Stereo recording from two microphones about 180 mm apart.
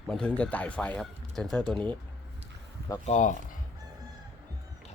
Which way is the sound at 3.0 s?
45° left (ahead or behind).